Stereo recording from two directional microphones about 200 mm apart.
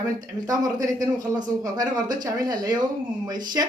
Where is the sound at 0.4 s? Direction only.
15° right (ahead or behind).